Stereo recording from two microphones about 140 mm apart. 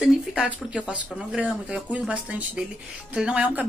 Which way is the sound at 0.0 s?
5° right (ahead or behind).